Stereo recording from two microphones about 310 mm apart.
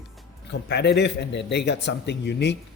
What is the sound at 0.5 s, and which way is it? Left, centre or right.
Speech, left.